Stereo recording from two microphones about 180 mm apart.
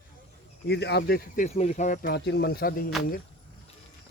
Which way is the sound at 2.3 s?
70° left (ahead or behind).